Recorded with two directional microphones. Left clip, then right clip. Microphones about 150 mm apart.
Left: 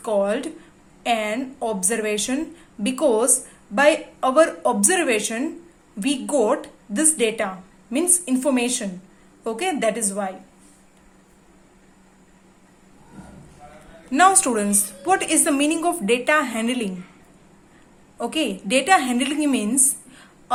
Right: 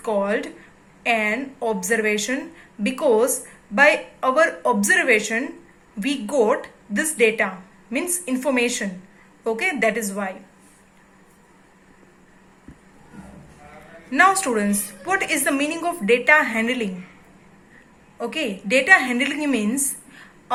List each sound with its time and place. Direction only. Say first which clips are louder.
0.0 s a woman's voice: left 1 dB; 35° left (ahead or behind)
14.1 s a woman's voice: even; 30° left (ahead or behind)
18.2 s a woman's voice: left 2 dB; 40° left (ahead or behind)